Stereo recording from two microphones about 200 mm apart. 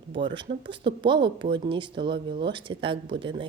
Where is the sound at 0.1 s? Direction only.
60° right (ahead or behind).